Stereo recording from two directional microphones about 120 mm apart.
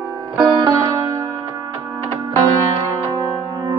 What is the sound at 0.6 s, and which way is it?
Music, 35° right (ahead or behind).